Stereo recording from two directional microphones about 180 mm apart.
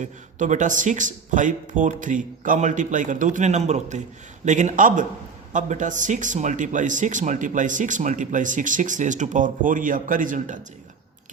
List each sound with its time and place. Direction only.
0.0 s speech: 45° right (ahead or behind)